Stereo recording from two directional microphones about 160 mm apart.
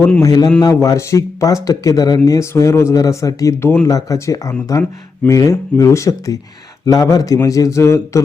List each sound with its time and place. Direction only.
0.2 s speech: 25° left (ahead or behind)